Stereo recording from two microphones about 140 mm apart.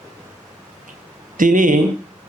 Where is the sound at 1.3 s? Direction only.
70° right (ahead or behind).